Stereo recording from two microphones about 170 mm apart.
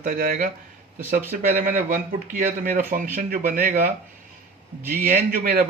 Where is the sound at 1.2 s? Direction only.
10° right (ahead or behind).